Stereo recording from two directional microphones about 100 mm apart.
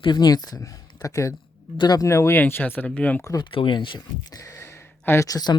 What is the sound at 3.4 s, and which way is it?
Speech, 55° left (ahead or behind).